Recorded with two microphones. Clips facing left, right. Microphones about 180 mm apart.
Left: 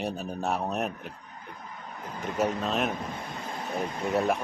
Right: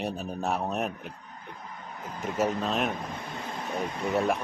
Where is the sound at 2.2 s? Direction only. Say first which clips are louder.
Even; centre (ahead or behind).